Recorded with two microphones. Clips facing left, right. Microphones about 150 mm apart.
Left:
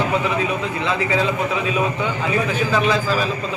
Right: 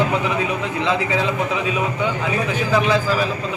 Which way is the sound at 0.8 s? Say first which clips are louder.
Even; 15° right (ahead or behind).